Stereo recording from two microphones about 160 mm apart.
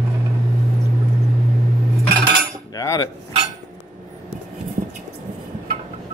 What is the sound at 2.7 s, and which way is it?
Cutlery, 20° left (ahead or behind).